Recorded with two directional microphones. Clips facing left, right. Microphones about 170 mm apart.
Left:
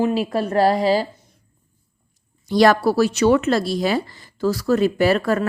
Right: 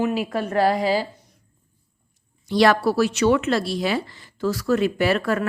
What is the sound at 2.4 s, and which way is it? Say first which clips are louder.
Speech: left 2 dB; 40° left (ahead or behind).